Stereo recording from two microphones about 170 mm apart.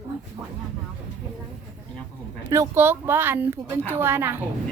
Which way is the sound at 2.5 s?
15° right (ahead or behind).